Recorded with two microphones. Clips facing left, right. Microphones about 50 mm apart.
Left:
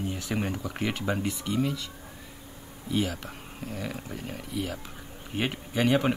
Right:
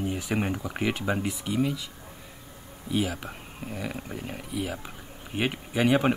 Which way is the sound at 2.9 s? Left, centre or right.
Centre.